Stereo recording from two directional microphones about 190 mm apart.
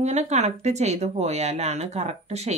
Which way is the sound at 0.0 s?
35° right (ahead or behind).